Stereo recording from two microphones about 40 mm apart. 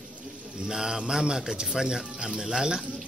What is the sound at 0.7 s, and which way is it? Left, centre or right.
Speech, centre.